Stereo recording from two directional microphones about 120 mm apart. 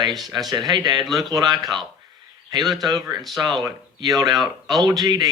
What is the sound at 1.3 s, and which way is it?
Speech, 35° right (ahead or behind).